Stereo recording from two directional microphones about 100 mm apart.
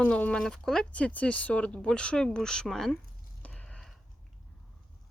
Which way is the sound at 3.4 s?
15° left (ahead or behind).